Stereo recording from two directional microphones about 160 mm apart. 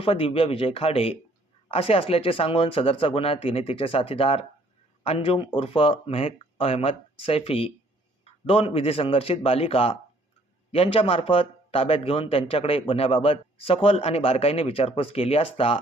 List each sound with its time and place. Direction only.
0.0 s a man's voice: 35° left (ahead or behind)